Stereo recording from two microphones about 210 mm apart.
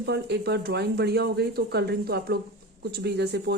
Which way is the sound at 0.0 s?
50° right (ahead or behind).